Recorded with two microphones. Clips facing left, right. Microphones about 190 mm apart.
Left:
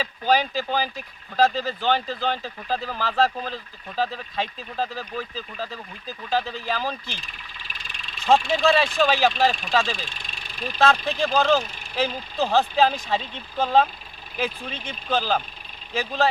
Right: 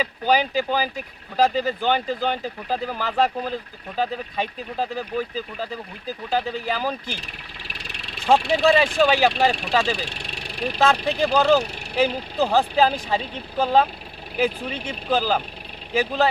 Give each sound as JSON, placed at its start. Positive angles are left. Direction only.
{"t": 0.0, "sound": "speech", "side_deg": -10}
{"t": 6.3, "sound": "speech", "side_deg": -10}
{"t": 7.7, "sound": "engine", "side_deg": -70}
{"t": 8.4, "sound": "speech", "side_deg": -70}
{"t": 8.6, "sound": "speech", "side_deg": -10}
{"t": 9.5, "sound": "speech", "side_deg": -70}
{"t": 9.7, "sound": "speech", "side_deg": -10}
{"t": 10.0, "sound": "vehicle", "side_deg": -70}
{"t": 11.2, "sound": "speech", "side_deg": -10}